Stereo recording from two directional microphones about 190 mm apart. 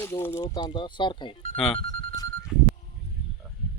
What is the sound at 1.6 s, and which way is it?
Speech, 5° left (ahead or behind).